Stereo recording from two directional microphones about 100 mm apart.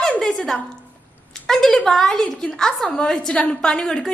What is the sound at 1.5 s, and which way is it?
A woman's voice, 5° left (ahead or behind).